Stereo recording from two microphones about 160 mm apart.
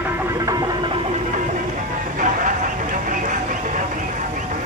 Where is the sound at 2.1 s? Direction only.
55° right (ahead or behind).